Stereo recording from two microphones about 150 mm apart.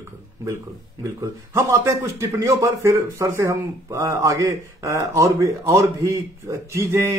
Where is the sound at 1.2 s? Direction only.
20° right (ahead or behind).